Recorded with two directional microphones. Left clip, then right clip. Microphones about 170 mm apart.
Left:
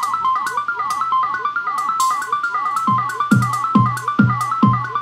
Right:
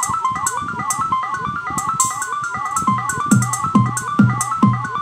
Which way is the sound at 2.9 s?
35° right (ahead or behind).